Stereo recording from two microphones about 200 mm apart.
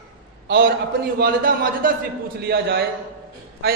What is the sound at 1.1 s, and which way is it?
A man's voice, 50° right (ahead or behind).